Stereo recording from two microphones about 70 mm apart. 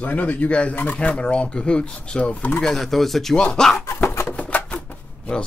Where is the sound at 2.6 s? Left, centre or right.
Centre.